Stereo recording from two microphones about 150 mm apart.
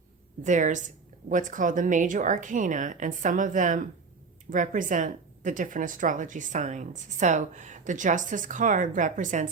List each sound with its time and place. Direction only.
0.4 s a woman's voice: 55° right (ahead or behind)